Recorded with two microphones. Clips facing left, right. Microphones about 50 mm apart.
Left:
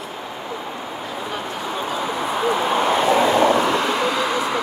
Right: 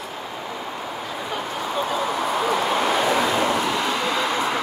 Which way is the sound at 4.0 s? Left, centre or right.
Centre.